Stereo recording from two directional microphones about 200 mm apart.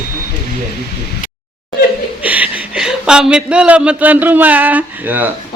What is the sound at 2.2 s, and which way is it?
Speech, 5° right (ahead or behind).